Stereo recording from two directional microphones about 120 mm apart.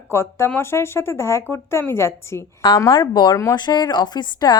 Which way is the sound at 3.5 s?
40° left (ahead or behind).